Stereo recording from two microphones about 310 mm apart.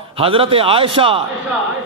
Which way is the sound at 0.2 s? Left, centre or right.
Centre.